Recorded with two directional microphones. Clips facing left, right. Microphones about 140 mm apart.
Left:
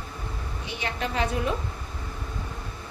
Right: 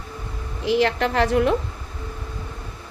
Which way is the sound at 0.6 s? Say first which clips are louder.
Right 13 dB; 90° right.